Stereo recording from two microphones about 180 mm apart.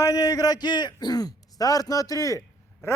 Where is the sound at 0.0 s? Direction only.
20° left (ahead or behind).